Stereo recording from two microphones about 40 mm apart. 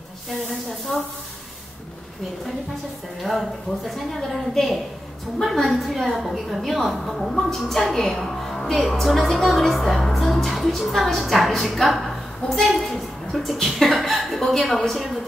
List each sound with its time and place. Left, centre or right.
3.2 s a woman's voice: centre
10.0 s music: centre
10.5 s a woman's voice: centre